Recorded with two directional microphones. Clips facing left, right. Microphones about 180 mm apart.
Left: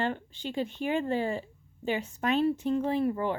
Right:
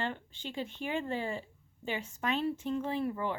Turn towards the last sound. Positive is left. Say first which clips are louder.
# left 6 dB
turn(degrees=35)  # may be behind; listen again after turning